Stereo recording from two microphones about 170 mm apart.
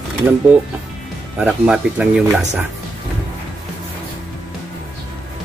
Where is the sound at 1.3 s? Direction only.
5° right (ahead or behind).